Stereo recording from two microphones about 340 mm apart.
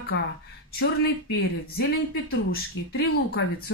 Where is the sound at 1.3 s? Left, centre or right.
Left.